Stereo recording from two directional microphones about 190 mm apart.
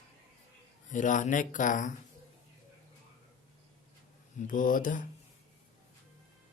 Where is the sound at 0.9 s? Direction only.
40° left (ahead or behind).